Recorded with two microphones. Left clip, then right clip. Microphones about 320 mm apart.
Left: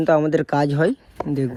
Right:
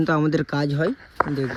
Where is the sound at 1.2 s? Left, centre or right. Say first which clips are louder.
Right 2 dB; left.